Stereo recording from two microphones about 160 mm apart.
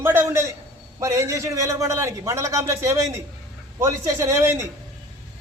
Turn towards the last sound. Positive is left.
turn(degrees=-15)  # may be behind; listen again after turning